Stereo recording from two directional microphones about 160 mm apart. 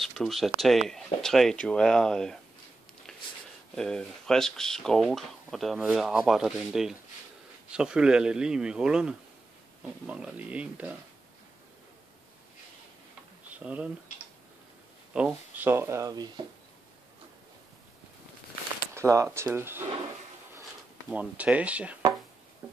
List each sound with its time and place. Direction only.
0.0 s a sound: centre (ahead or behind)
0.6 s speech: centre (ahead or behind)
3.1 s a sound: 5° left (ahead or behind)
3.7 s speech: 5° left (ahead or behind)
13.6 s speech: 10° right (ahead or behind)
15.1 s speech: 10° right (ahead or behind); by 16.4 s 25° right (ahead or behind)
18.9 s speech: 20° right (ahead or behind)
21.1 s speech: 10° right (ahead or behind)